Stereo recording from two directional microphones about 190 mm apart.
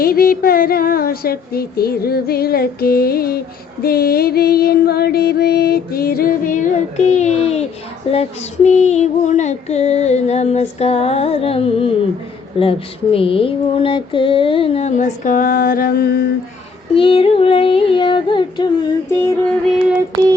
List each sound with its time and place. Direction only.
0.0 s music: 50° left (ahead or behind); by 7.6 s 35° left (ahead or behind)
8.1 s female singing: 35° left (ahead or behind); by 16.2 s 55° left (ahead or behind)
16.9 s female singing: 30° left (ahead or behind)